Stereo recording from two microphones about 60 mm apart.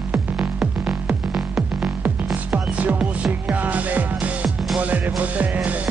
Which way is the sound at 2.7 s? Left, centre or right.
Right.